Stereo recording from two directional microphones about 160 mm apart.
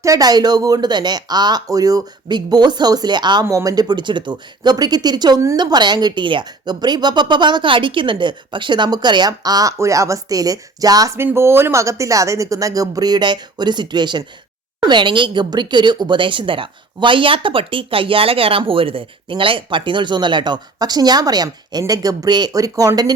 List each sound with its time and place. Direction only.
0.0 s speech: 20° right (ahead or behind)